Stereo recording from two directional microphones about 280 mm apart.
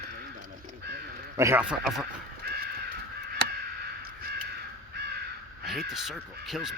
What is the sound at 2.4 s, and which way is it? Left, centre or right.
Crow, right.